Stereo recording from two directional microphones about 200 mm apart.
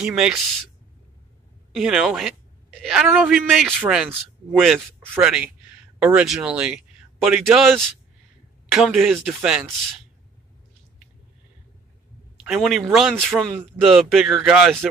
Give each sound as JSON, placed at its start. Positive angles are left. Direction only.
{"t": 0.0, "sound": "a man's voice", "side_deg": -5}
{"t": 1.7, "sound": "a man's voice", "side_deg": 0}
{"t": 12.4, "sound": "a man's voice", "side_deg": 0}